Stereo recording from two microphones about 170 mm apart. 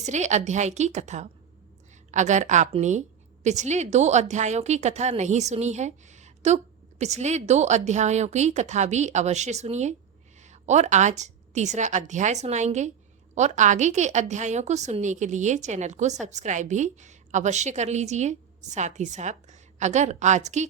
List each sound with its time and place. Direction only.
0.0 s a woman's voice: 45° right (ahead or behind)